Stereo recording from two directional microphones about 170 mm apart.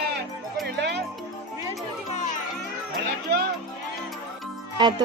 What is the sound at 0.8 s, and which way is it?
Music, 80° right.